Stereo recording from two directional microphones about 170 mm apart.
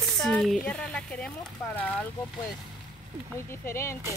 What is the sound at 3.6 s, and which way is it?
Speech, 15° left (ahead or behind).